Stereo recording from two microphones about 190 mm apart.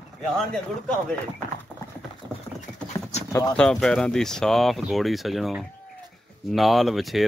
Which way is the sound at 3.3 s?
20° left (ahead or behind).